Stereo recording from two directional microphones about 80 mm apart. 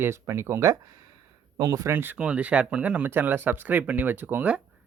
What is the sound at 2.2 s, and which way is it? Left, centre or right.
Speech, centre.